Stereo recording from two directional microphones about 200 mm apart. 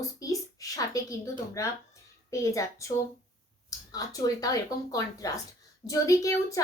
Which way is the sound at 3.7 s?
20° left (ahead or behind).